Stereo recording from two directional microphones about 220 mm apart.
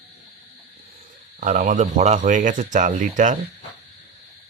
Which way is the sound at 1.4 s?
35° right (ahead or behind).